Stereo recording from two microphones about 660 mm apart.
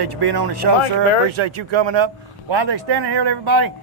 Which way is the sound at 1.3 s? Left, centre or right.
Right.